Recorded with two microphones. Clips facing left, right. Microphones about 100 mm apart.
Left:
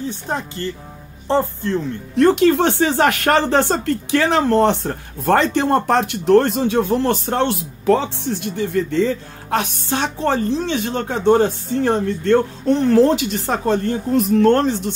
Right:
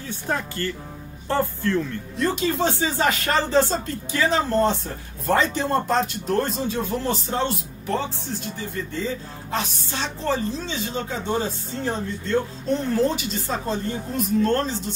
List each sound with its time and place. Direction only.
0.3 s speech: 20° left (ahead or behind)
2.1 s speech: 65° left (ahead or behind)